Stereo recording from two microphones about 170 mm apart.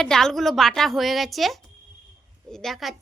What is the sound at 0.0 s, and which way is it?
A woman's voice, 5° left (ahead or behind).